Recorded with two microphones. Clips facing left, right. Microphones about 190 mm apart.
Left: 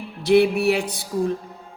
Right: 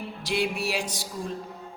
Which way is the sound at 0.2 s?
60° left (ahead or behind).